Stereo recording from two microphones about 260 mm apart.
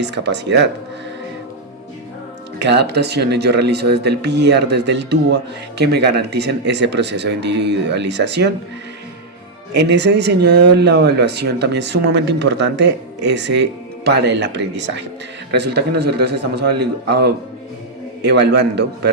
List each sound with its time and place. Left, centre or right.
0.0 s speech: right
2.6 s speech: right
9.7 s speech: right